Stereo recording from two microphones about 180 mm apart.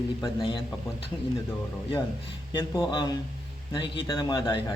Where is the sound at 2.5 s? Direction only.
30° left (ahead or behind).